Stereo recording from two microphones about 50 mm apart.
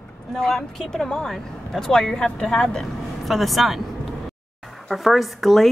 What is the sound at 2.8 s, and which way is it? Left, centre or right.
Vehicle, centre.